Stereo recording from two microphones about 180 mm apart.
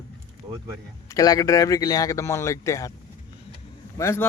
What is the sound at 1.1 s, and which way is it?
Speech, 20° left (ahead or behind).